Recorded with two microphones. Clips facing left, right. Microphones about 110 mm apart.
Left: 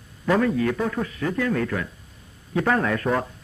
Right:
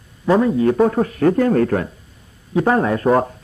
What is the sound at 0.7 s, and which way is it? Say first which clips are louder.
Speech: right 10 dB; 40° right (ahead or behind).